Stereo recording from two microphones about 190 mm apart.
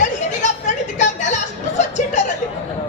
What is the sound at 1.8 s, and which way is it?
Chuckle, 40° left (ahead or behind).